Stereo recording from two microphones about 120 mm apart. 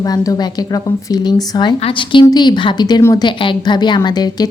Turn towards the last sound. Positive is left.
turn(degrees=35)  # may be behind; listen again after turning